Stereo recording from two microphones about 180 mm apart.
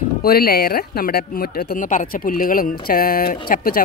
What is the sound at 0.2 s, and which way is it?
Speech, 55° left (ahead or behind).